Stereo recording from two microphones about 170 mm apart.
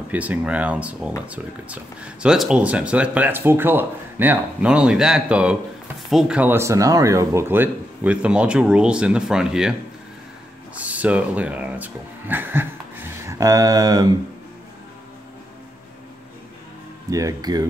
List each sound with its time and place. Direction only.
0.1 s speech: 10° right (ahead or behind)
10.8 s speech: 10° right (ahead or behind)
17.1 s speech: 20° right (ahead or behind)